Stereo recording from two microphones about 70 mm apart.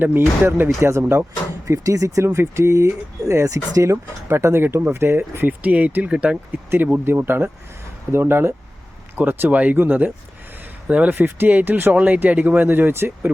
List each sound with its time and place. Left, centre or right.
0.0 s speech: right
1.6 s speech: right; by 6.3 s centre
6.7 s speech: right